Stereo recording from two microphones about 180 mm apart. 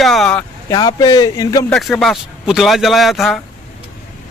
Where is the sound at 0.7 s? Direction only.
20° left (ahead or behind).